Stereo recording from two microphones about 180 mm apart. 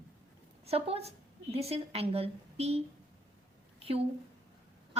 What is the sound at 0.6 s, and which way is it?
A woman's voice, 35° right (ahead or behind).